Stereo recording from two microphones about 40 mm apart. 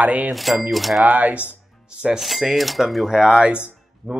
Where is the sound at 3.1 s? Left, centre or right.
Centre.